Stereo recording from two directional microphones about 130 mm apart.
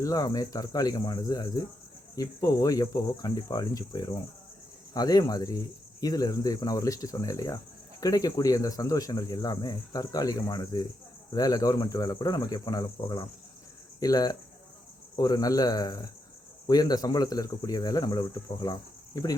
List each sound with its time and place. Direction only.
0.0 s speech: 30° left (ahead or behind)